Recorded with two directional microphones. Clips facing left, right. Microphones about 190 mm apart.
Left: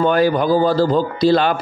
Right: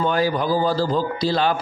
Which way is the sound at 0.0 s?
60° left (ahead or behind).